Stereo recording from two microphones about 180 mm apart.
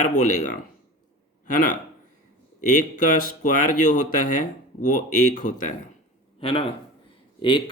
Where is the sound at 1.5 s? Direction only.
50° left (ahead or behind).